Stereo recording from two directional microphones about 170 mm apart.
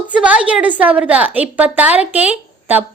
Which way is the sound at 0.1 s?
5° right (ahead or behind).